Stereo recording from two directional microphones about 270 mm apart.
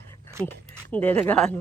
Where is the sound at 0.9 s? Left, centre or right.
Centre.